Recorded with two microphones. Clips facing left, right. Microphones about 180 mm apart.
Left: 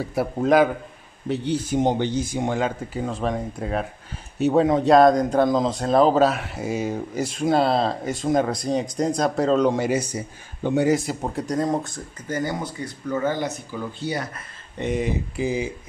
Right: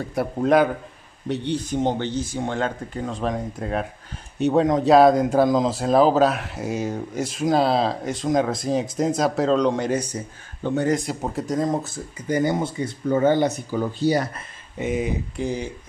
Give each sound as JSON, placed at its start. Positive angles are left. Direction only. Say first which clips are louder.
{"t": 0.0, "sound": "speech", "louder": "even", "side_deg": 0}
{"t": 1.8, "sound": "speech", "louder": "left 3 dB", "side_deg": 15}
{"t": 12.3, "sound": "speech", "louder": "right 5 dB", "side_deg": -20}
{"t": 13.7, "sound": "speech", "louder": "right 8 dB", "side_deg": -40}
{"t": 14.8, "sound": "speech", "louder": "even", "side_deg": 0}